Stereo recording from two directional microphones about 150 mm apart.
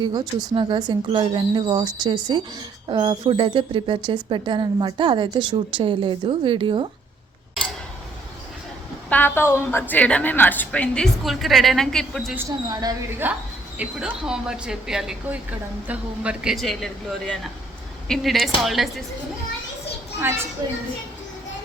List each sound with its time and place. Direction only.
0.0 s speech: 30° right (ahead or behind)
9.0 s a woman's voice: 15° left (ahead or behind)
12.3 s speech: 15° right (ahead or behind)
12.6 s speech: 25° right (ahead or behind)
13.2 s speech: 15° right (ahead or behind)